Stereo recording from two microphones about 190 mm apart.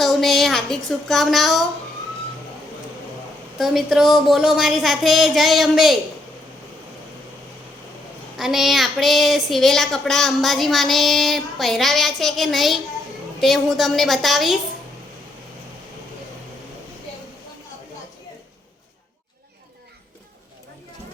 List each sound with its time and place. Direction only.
0.0 s a sound: centre (ahead or behind)
0.9 s a woman's voice: centre (ahead or behind)
3.6 s a woman's voice: centre (ahead or behind)
8.4 s a woman's voice: centre (ahead or behind)